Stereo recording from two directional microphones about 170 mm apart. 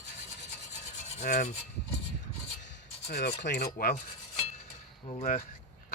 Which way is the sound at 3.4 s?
70° left (ahead or behind).